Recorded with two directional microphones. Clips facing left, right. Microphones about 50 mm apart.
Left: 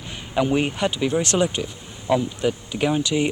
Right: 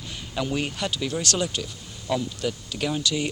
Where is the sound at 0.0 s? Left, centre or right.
Left.